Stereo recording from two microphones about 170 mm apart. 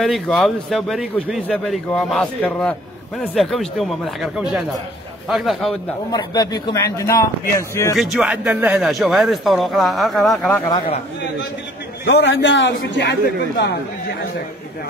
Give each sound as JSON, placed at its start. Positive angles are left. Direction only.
{"t": 0.0, "sound": "a man's voice", "side_deg": 5}
{"t": 6.1, "sound": "a man's voice", "side_deg": 25}
{"t": 8.0, "sound": "a man's voice", "side_deg": -5}
{"t": 12.0, "sound": "a man's voice", "side_deg": 90}